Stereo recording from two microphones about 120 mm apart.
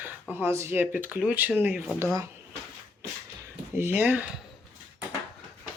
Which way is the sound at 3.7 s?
15° right (ahead or behind).